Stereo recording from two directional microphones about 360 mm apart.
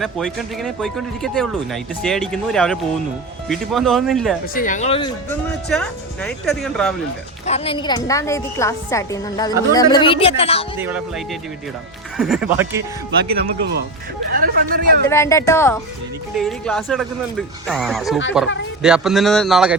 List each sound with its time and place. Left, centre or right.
0.0 s speech: centre
4.5 s a woman's voice: left
5.6 s speech: centre
7.4 s a woman's voice: centre
10.8 s speech: centre
13.3 s speech: right
15.0 s a woman's voice: centre